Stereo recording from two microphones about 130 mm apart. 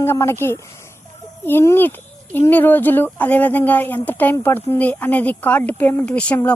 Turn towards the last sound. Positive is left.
turn(degrees=10)  # may be behind; listen again after turning